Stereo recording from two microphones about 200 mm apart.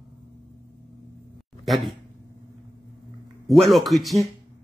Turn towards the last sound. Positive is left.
turn(degrees=0)  # may be behind; listen again after turning